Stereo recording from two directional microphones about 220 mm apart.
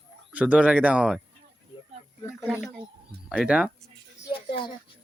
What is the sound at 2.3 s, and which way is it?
Speech, 10° left (ahead or behind).